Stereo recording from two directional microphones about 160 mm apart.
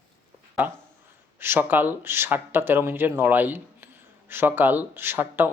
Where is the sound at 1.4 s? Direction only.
15° right (ahead or behind).